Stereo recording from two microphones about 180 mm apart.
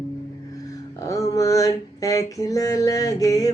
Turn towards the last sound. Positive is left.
turn(degrees=20)  # may be behind; listen again after turning